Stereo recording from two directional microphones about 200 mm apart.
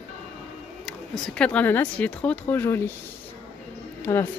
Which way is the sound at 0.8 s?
5° left (ahead or behind).